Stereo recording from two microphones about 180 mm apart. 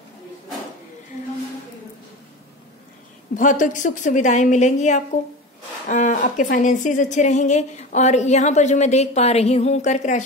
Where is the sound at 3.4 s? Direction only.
45° left (ahead or behind).